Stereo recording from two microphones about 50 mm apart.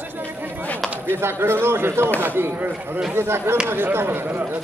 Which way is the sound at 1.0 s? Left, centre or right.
Right.